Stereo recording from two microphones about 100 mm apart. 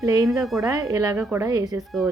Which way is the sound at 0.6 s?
35° right (ahead or behind).